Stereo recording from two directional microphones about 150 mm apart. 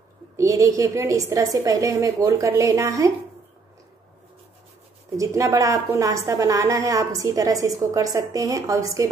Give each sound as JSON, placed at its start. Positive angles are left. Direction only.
{"t": 0.4, "sound": "a woman's voice", "side_deg": -20}
{"t": 5.1, "sound": "a woman's voice", "side_deg": -20}